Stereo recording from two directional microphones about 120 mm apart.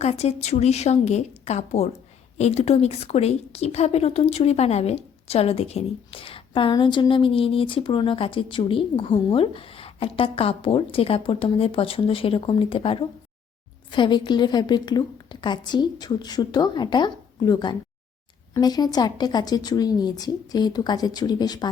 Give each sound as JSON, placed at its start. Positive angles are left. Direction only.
{"t": 0.0, "sound": "a woman's voice", "side_deg": 60}